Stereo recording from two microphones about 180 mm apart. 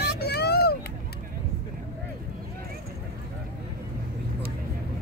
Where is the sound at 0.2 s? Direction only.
65° left (ahead or behind).